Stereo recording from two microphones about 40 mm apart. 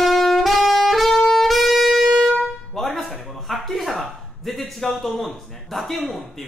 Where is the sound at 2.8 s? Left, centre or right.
Centre.